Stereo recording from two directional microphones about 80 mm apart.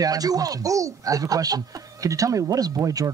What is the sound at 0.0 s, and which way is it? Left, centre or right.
Speech, right.